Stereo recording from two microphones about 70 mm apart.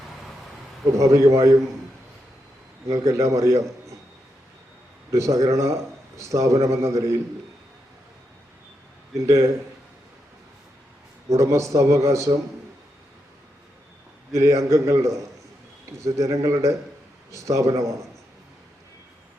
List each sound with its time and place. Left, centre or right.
0.9 s a man's voice: right
2.9 s a man's voice: right
5.1 s a man's voice: right
9.1 s a man's voice: right
11.3 s a man's voice: right
14.3 s a man's voice: right